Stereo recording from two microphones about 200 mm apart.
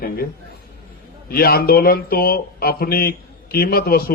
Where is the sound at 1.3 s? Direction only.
50° left (ahead or behind).